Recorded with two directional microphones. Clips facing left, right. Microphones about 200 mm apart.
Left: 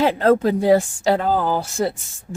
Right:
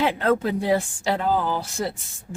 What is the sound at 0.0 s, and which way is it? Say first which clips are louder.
Speech: left 5 dB; 35° left (ahead or behind).